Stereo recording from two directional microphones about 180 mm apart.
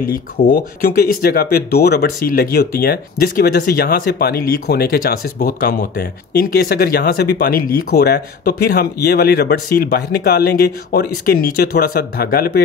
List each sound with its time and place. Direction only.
0.0 s speech: 55° left (ahead or behind)